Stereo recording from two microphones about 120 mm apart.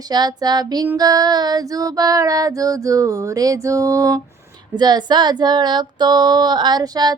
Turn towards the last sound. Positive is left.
turn(degrees=-35)  # may be behind; listen again after turning